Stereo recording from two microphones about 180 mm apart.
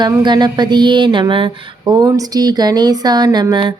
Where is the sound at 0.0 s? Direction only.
25° right (ahead or behind).